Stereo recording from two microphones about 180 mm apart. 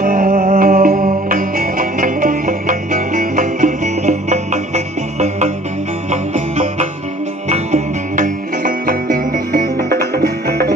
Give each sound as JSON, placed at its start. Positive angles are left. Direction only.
{"t": 0.0, "sound": "music", "side_deg": -50}